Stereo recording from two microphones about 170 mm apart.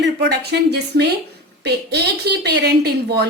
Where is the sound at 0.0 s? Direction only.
75° right (ahead or behind).